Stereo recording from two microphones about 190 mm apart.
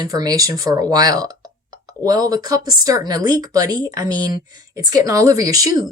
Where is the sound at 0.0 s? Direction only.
20° right (ahead or behind).